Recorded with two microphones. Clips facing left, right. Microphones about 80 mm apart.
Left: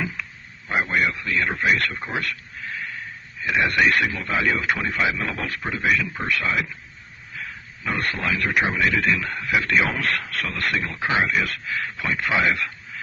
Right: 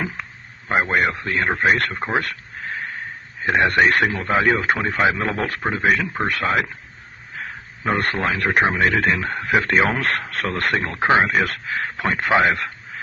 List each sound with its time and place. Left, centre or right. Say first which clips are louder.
0.7 s speech: right 3 dB; right
7.9 s speech: right 4 dB; right